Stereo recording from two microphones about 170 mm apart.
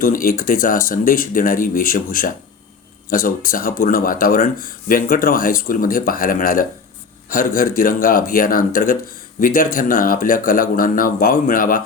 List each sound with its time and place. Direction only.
0.0 s speech: 55° left (ahead or behind)